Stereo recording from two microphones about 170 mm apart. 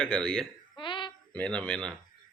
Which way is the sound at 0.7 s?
30° left (ahead or behind).